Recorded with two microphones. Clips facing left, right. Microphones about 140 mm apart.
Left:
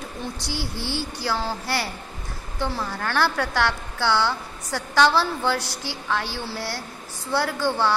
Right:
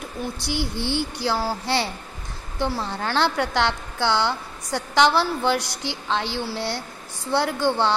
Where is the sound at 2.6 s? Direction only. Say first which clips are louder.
Right 2 dB; 20° right (ahead or behind).